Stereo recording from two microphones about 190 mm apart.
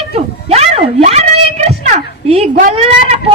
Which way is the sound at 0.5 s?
35° right (ahead or behind).